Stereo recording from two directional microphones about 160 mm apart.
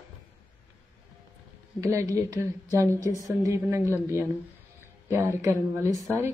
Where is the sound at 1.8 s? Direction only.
20° right (ahead or behind).